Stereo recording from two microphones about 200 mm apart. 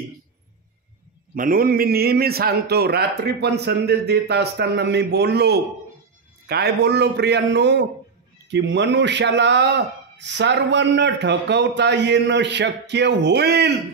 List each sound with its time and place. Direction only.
1.3 s a man's voice: 45° right (ahead or behind)